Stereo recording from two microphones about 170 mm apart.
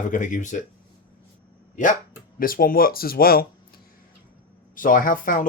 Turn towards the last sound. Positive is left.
turn(degrees=55)  # may be behind; listen again after turning